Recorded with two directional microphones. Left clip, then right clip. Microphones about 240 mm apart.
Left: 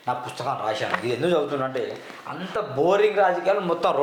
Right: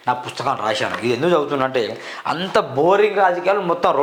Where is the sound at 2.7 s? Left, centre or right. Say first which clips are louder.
Right 2 dB; right.